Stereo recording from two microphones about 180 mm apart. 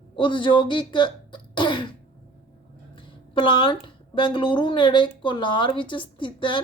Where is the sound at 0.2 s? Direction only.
25° left (ahead or behind).